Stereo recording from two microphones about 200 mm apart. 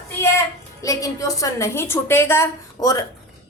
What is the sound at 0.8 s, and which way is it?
A woman's voice, 15° left (ahead or behind).